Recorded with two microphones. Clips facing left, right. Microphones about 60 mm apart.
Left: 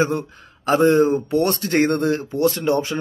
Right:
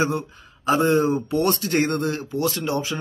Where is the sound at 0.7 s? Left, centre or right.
Left.